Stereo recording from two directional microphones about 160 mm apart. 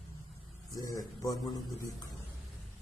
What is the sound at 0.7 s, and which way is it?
Speech, 20° left (ahead or behind).